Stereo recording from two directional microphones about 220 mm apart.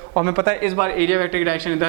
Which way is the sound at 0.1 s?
20° right (ahead or behind).